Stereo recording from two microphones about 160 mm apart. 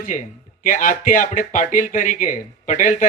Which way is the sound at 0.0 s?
55° left (ahead or behind).